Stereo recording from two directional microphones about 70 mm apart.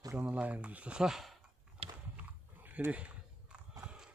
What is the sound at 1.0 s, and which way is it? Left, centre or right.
Speech, centre.